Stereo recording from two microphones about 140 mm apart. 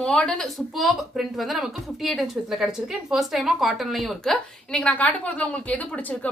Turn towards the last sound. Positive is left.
turn(degrees=10)  # may be behind; listen again after turning